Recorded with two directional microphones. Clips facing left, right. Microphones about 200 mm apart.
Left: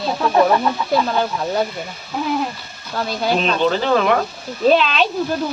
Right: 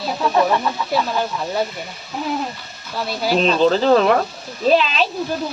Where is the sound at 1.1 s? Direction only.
Centre (ahead or behind).